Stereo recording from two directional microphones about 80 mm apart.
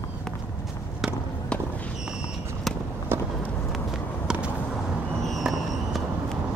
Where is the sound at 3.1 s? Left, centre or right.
Right.